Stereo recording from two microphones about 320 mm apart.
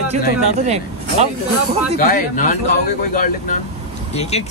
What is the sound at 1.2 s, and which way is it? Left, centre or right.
Speech, right.